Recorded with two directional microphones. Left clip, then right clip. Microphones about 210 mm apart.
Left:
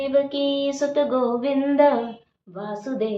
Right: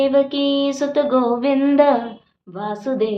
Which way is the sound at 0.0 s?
55° right (ahead or behind).